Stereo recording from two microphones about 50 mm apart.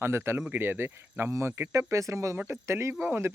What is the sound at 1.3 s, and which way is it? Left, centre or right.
Speech, right.